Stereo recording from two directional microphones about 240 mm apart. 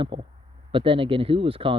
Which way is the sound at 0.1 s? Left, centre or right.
Centre.